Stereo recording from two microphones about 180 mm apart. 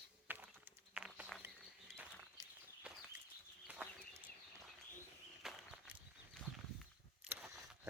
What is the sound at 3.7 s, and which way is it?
Chicken, 5° right (ahead or behind).